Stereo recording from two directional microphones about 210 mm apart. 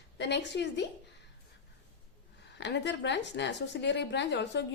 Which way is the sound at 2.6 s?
55° left (ahead or behind).